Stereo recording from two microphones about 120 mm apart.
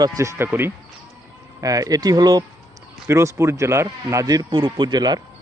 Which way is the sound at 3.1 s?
25° right (ahead or behind).